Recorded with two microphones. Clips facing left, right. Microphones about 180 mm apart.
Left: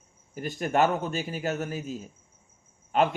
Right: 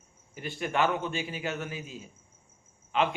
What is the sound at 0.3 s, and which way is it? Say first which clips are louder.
Speech: left 4 dB; 40° left (ahead or behind).